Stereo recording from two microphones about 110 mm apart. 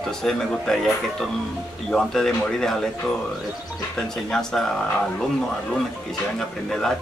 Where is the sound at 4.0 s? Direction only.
5° left (ahead or behind).